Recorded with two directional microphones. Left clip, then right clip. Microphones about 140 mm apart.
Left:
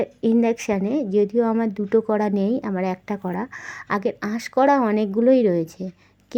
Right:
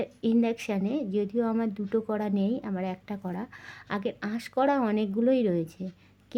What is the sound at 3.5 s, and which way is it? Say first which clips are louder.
Speech: left 10 dB; centre (ahead or behind).